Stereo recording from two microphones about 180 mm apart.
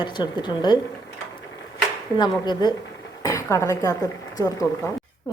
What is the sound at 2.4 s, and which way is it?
Speech, 25° left (ahead or behind).